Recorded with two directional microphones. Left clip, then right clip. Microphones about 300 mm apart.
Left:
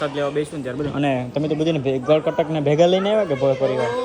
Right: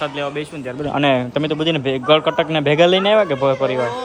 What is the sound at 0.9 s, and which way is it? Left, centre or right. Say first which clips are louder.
Speech: right 7 dB; right.